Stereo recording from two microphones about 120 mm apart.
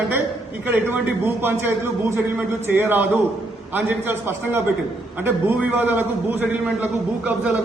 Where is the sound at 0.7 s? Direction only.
15° right (ahead or behind).